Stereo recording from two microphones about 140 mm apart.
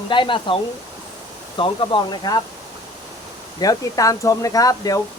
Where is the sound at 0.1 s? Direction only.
35° left (ahead or behind).